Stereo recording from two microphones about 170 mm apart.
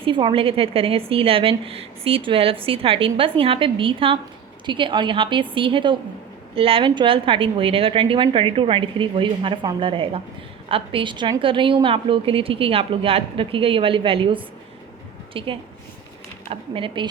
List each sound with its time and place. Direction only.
0.0 s a woman's voice: 30° right (ahead or behind)